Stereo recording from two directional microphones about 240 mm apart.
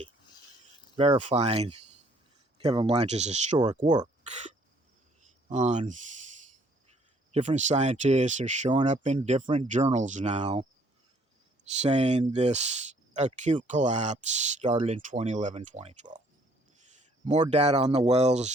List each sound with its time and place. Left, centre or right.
0.9 s speech: right
5.5 s speech: right
7.3 s speech: right
11.8 s speech: right
17.2 s speech: right